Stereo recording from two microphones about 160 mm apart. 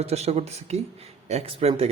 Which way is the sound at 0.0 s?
40° right (ahead or behind).